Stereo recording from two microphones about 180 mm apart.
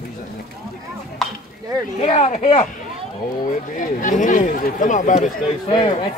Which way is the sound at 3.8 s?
45° left (ahead or behind).